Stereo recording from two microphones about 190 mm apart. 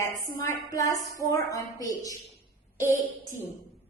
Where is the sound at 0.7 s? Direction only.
15° left (ahead or behind).